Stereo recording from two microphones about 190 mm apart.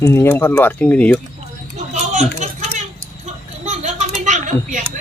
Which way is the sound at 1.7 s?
35° right (ahead or behind).